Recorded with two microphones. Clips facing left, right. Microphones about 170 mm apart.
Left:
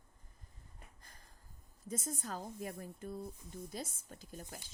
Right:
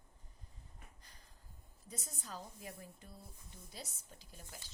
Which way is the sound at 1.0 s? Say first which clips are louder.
Left 2 dB; 50° left (ahead or behind).